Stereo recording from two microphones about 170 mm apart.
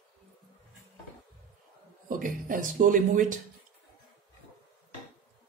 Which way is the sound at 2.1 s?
50° right (ahead or behind).